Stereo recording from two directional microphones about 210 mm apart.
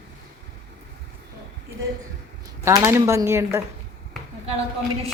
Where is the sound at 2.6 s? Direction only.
15° right (ahead or behind).